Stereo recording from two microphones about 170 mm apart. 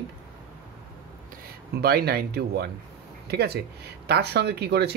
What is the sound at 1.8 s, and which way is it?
Speech, 65° right (ahead or behind).